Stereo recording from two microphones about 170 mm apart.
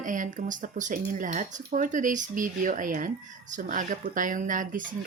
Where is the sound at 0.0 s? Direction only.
50° right (ahead or behind).